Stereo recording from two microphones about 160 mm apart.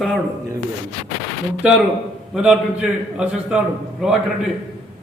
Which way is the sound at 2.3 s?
5° right (ahead or behind).